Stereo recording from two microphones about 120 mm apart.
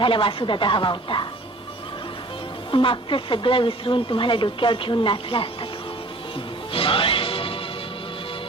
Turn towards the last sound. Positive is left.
turn(degrees=45)  # may be behind; listen again after turning